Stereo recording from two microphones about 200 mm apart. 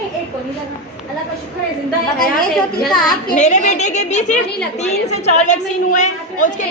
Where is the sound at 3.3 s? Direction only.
35° left (ahead or behind).